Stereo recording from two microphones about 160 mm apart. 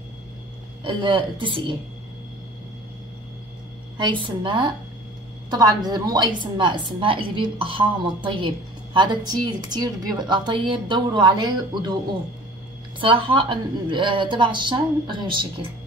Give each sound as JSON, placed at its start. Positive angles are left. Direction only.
{"t": 0.8, "sound": "a woman's voice", "side_deg": -30}
{"t": 4.0, "sound": "a woman's voice", "side_deg": -30}
{"t": 13.0, "sound": "a woman's voice", "side_deg": -35}